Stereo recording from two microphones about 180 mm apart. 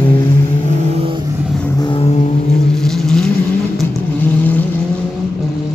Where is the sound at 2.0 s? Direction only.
40° left (ahead or behind).